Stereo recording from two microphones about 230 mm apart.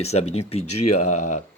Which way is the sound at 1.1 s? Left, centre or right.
Left.